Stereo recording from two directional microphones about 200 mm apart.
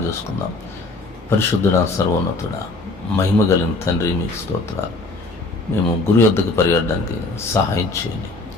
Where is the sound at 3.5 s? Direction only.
15° left (ahead or behind).